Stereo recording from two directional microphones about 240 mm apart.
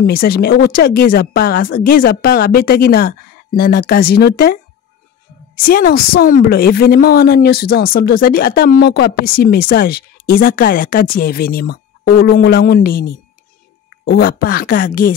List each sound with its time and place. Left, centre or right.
0.0 s speech: left
5.7 s speech: left